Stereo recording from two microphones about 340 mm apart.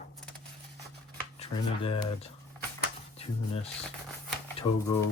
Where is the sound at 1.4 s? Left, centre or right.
Centre.